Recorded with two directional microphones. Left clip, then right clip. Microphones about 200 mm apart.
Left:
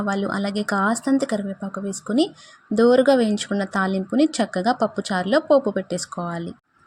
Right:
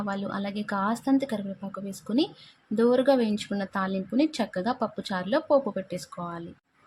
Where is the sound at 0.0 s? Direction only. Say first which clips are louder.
Left 8 dB; 20° left (ahead or behind).